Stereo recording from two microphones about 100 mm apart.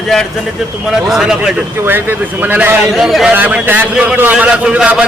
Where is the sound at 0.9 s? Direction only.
5° right (ahead or behind).